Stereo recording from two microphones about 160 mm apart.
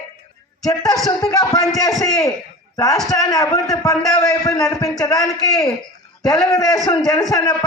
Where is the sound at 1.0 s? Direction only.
25° left (ahead or behind).